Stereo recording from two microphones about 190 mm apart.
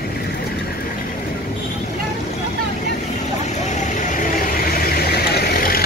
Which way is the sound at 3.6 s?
40° left (ahead or behind).